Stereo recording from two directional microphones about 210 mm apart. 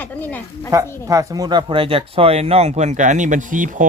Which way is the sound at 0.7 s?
15° right (ahead or behind).